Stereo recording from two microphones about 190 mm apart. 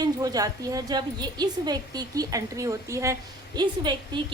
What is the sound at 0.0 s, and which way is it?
A woman's voice, 20° right (ahead or behind).